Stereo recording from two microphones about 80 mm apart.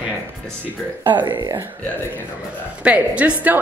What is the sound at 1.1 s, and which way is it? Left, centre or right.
Speech, right.